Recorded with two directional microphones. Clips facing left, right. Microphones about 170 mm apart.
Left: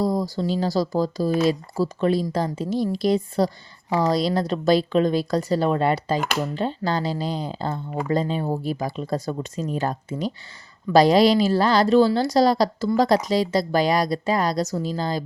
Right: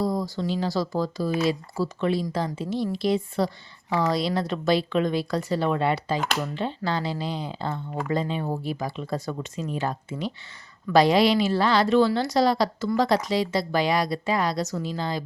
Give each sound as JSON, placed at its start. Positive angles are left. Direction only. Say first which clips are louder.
{"t": 0.0, "sound": "a woman's voice", "louder": "left 3 dB", "side_deg": 35}